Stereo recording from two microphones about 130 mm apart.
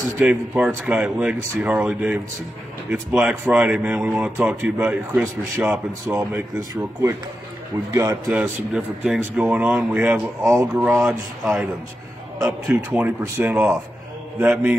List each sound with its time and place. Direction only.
0.2 s a man's voice: 10° right (ahead or behind)
7.9 s speech: 30° right (ahead or behind)
8.3 s speech: 5° right (ahead or behind)
10.4 s speech: 20° right (ahead or behind)
10.9 s a man's voice: centre (ahead or behind); by 13.7 s 20° right (ahead or behind)
14.4 s a man's voice: 5° right (ahead or behind)